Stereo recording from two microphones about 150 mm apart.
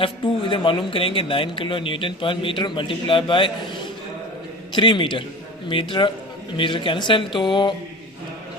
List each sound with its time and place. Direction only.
0.0 s speech: 35° left (ahead or behind)
4.7 s speech: 30° left (ahead or behind)